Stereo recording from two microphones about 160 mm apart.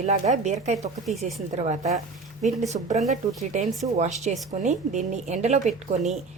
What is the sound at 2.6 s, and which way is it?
Speech, 45° right (ahead or behind).